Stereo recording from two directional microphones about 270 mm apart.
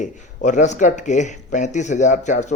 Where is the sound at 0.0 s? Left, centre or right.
Left.